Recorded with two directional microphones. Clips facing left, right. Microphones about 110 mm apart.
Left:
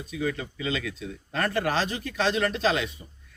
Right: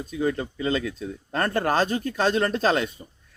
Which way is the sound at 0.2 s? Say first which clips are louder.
Right 4 dB; 35° right (ahead or behind).